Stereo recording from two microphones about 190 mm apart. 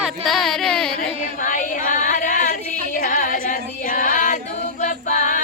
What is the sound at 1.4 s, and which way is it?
Female singing, 45° left (ahead or behind).